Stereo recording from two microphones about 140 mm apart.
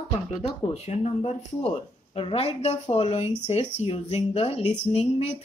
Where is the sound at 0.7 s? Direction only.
50° left (ahead or behind).